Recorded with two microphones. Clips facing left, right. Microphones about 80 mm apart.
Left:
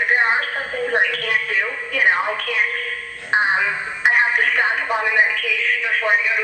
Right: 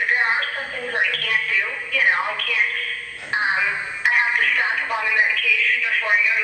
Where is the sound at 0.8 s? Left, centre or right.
Left.